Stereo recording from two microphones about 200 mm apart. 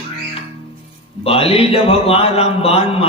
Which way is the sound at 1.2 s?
30° left (ahead or behind).